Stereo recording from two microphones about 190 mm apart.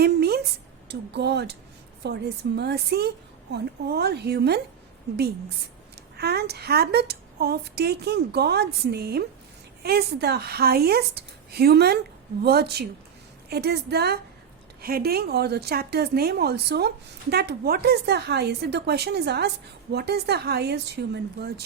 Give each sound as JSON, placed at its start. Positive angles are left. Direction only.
{"t": 0.0, "sound": "a sound", "side_deg": -55}
{"t": 0.9, "sound": "a woman's voice", "side_deg": -60}
{"t": 6.1, "sound": "a woman's voice", "side_deg": -55}